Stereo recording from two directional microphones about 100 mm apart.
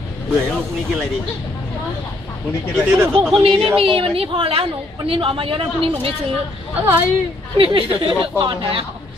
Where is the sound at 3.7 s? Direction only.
65° right (ahead or behind).